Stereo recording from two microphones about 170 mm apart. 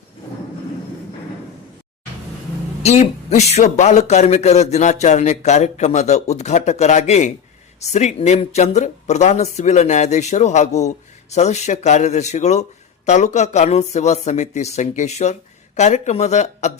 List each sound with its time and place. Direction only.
2.8 s a man's voice: 40° left (ahead or behind)